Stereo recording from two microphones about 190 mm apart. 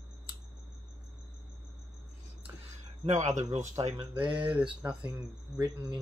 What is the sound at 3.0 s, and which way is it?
Speech, 40° right (ahead or behind).